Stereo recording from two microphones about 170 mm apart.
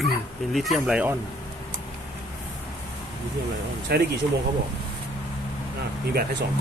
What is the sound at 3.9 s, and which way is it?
Speech, 70° right (ahead or behind).